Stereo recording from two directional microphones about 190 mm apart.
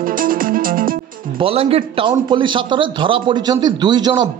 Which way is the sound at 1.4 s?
30° right (ahead or behind).